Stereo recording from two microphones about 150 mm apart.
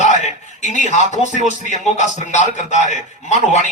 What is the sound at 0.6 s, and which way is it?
A man's voice, 55° left (ahead or behind).